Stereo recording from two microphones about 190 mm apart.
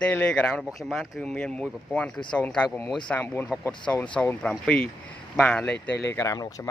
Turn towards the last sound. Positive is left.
turn(degrees=15)  # may be behind; listen again after turning